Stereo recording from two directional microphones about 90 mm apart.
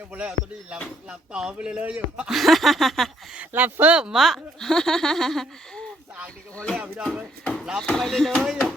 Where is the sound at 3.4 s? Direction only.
20° right (ahead or behind); by 6.8 s 10° left (ahead or behind).